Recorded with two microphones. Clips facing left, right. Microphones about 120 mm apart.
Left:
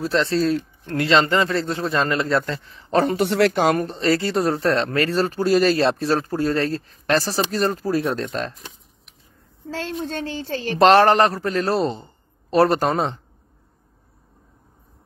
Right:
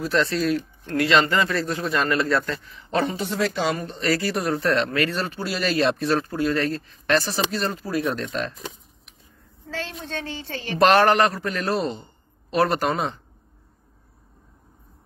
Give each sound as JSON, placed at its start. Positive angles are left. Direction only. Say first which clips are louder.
{"t": 0.0, "sound": "speech", "louder": "left 2 dB", "side_deg": 30}
{"t": 3.2, "sound": "speech", "louder": "left 7 dB", "side_deg": 70}
{"t": 3.8, "sound": "speech", "louder": "left 3 dB", "side_deg": 30}
{"t": 10.3, "sound": "a woman's voice", "louder": "left 5 dB", "side_deg": 45}
{"t": 10.8, "sound": "speech", "louder": "left 3 dB", "side_deg": 30}